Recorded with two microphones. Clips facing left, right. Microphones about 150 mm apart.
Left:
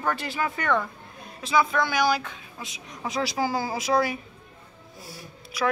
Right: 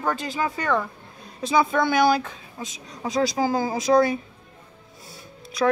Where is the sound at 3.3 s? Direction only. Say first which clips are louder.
Right 4 dB; 20° right (ahead or behind).